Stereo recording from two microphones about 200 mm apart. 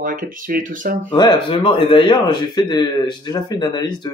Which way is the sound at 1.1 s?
20° left (ahead or behind).